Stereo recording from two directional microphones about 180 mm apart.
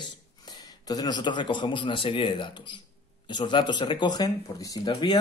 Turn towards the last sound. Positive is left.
turn(degrees=25)  # may be behind; listen again after turning